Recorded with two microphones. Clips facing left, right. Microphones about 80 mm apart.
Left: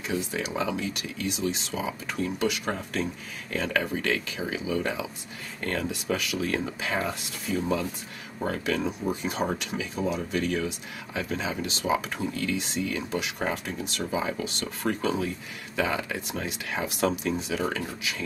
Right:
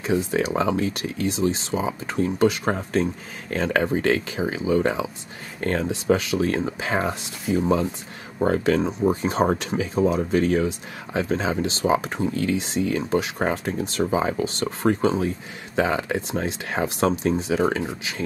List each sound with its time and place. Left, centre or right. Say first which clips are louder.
0.0 s speech: right 8 dB; right
6.0 s speech: right 11 dB; right